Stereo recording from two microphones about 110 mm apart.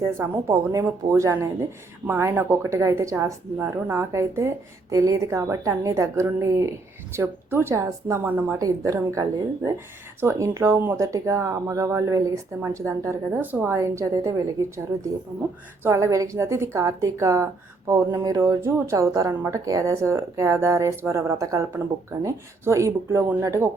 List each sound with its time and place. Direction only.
0.0 s speech: 30° right (ahead or behind)
8.5 s speech: 30° right (ahead or behind)
15.8 s speech: 25° right (ahead or behind)